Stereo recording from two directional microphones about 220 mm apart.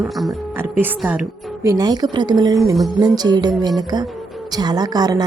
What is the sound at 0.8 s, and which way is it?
A woman's voice, 5° right (ahead or behind).